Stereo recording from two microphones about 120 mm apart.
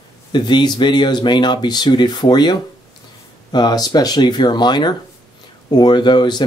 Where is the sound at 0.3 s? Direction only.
40° left (ahead or behind).